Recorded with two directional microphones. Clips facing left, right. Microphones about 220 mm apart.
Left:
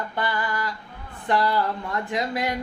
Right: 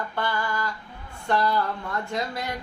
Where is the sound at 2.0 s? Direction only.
15° left (ahead or behind).